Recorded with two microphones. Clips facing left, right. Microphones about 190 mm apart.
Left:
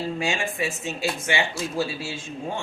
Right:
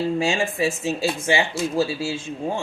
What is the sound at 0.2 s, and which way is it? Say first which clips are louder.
Speech: right 5 dB; 30° right (ahead or behind).